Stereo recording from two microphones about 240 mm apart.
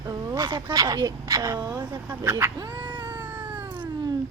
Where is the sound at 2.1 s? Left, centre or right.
Centre.